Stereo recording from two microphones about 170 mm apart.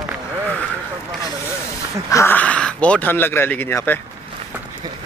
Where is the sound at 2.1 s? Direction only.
15° left (ahead or behind).